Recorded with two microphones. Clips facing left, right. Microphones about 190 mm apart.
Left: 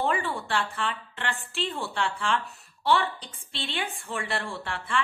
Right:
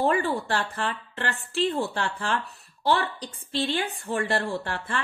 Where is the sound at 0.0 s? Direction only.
40° right (ahead or behind).